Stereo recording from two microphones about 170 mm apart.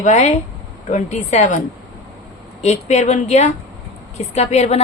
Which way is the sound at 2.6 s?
40° left (ahead or behind).